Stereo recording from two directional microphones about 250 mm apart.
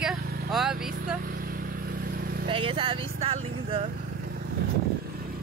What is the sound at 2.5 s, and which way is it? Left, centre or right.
Speech, right.